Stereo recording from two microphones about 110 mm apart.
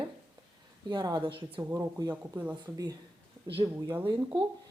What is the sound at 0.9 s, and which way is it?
Speech, 40° right (ahead or behind).